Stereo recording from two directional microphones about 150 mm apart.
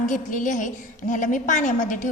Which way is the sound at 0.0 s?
60° left (ahead or behind).